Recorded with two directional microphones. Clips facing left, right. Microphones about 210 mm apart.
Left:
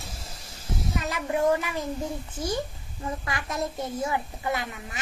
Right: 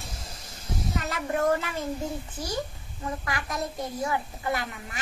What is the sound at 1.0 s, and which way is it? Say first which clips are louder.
Speech: left 2 dB; 15° left (ahead or behind).